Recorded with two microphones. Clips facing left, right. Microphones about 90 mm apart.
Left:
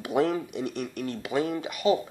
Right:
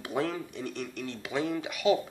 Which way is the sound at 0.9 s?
50° left (ahead or behind).